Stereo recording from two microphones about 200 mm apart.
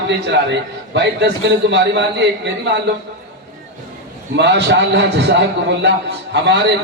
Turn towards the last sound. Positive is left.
turn(degrees=-60)  # may be behind; listen again after turning